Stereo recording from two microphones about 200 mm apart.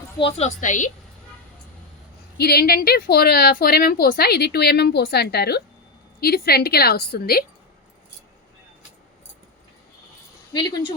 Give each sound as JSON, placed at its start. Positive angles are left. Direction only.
{"t": 0.2, "sound": "a woman's voice", "side_deg": 30}
{"t": 2.4, "sound": "a woman's voice", "side_deg": 50}
{"t": 10.5, "sound": "speech", "side_deg": 20}